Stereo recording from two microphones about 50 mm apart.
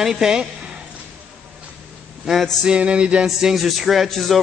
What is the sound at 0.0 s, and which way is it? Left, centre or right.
Speech, centre.